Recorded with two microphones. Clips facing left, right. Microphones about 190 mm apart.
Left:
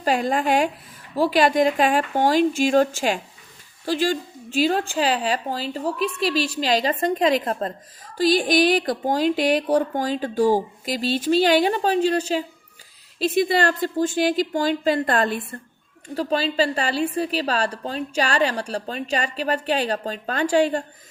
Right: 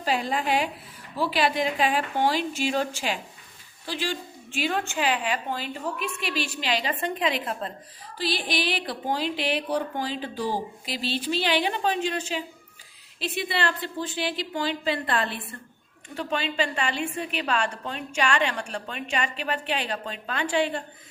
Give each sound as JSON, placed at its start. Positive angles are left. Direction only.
{"t": 0.0, "sound": "a woman's voice", "side_deg": 50}